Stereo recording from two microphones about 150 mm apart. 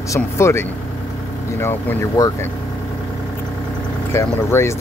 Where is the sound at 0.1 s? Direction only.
20° left (ahead or behind).